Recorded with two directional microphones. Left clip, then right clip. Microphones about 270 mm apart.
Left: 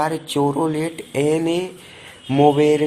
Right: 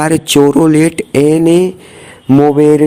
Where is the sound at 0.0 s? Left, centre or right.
Right.